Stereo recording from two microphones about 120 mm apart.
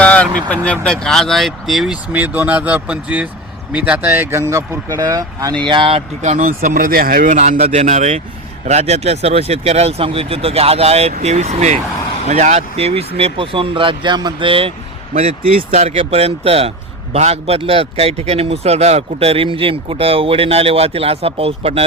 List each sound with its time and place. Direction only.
0.0 s speech: 10° left (ahead or behind)
2.1 s speech: 15° right (ahead or behind); by 6.0 s 45° right (ahead or behind)
6.2 s speech: 85° right
8.6 s speech: 65° right (ahead or behind); by 14.7 s 45° right (ahead or behind)
15.2 s speech: 60° right (ahead or behind)